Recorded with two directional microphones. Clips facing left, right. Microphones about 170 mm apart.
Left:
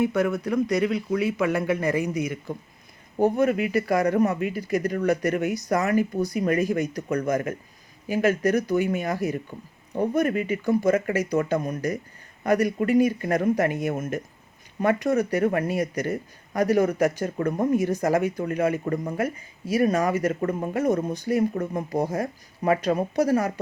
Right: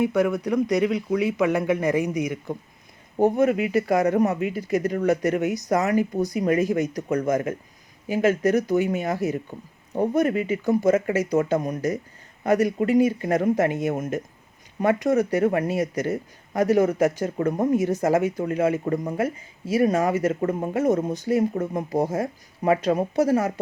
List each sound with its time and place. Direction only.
0.0 s speech: 10° right (ahead or behind)